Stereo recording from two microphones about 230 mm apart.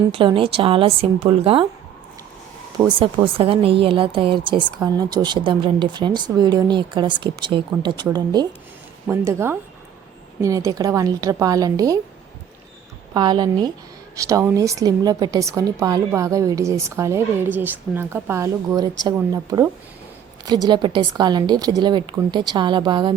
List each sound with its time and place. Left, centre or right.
0.1 s speech: right
3.0 s a woman's voice: right
13.1 s a woman's voice: centre